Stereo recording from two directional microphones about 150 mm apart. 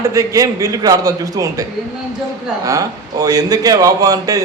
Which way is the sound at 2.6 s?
20° right (ahead or behind).